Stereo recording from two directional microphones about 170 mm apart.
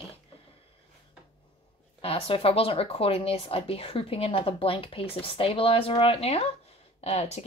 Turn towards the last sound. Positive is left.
turn(degrees=40)  # may be behind; listen again after turning